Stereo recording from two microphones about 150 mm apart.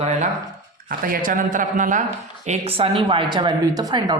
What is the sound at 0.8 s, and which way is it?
Speech, 70° right (ahead or behind).